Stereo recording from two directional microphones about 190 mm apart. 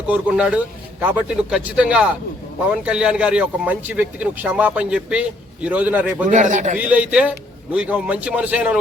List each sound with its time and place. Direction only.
0.1 s a man's voice: 5° right (ahead or behind)
6.2 s a man's voice: 40° right (ahead or behind)
6.7 s a man's voice: 10° right (ahead or behind)